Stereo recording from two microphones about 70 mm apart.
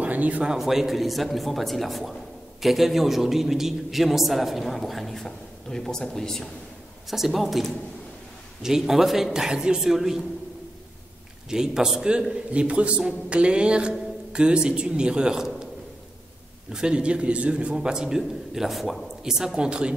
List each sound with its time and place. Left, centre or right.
0.0 s a sound: right
0.5 s a man's voice: centre
11.5 s a man's voice: centre
16.7 s a man's voice: centre